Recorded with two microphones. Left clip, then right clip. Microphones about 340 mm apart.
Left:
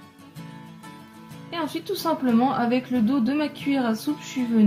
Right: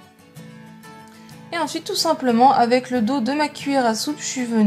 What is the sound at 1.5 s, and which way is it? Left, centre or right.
A woman's voice, centre.